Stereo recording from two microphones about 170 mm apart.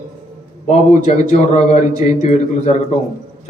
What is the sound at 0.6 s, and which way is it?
A man's voice, 40° left (ahead or behind).